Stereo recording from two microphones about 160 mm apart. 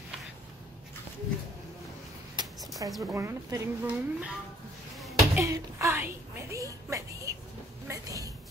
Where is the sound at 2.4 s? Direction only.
30° right (ahead or behind).